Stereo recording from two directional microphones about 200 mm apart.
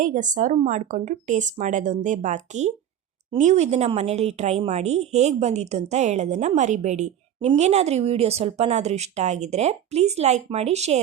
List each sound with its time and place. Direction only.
0.0 s a woman's voice: 40° right (ahead or behind)